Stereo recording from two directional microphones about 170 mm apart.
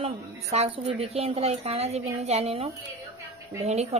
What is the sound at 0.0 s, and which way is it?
A woman's voice, 40° right (ahead or behind).